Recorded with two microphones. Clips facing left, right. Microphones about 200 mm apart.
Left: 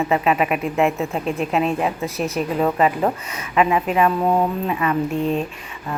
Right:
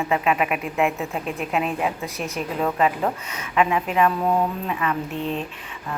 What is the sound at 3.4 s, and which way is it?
Speech, 5° left (ahead or behind).